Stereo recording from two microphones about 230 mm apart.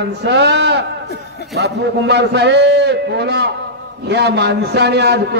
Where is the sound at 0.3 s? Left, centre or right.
Right.